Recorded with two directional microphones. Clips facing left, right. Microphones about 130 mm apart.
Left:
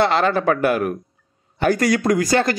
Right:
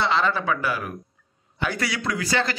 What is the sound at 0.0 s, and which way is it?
Speech, 55° left (ahead or behind).